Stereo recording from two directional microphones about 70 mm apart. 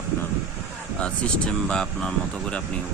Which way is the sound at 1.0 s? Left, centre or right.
Centre.